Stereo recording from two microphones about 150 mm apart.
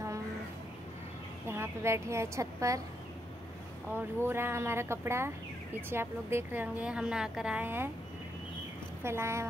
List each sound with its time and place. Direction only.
1.5 s a woman's voice: 15° right (ahead or behind)
3.9 s a woman's voice: 15° right (ahead or behind)
9.0 s a woman's voice: 15° right (ahead or behind)